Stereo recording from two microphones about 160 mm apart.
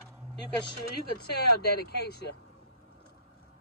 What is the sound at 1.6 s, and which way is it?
Speech, 85° left.